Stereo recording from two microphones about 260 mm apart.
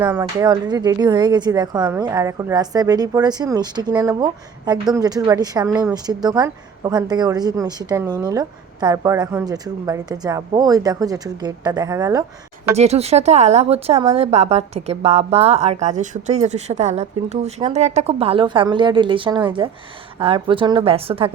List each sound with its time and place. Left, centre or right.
0.0 s speech: centre
12.7 s a woman's voice: right